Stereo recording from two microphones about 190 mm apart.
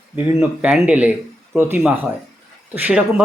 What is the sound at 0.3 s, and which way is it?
Speech, 5° right (ahead or behind).